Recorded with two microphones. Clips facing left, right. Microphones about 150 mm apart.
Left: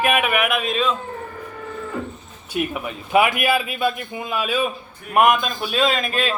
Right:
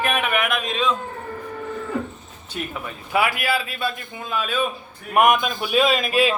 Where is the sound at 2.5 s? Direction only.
15° left (ahead or behind).